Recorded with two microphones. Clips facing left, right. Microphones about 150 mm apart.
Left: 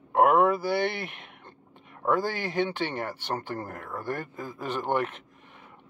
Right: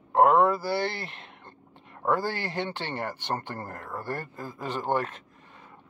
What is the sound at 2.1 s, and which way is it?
Speech, 15° left (ahead or behind).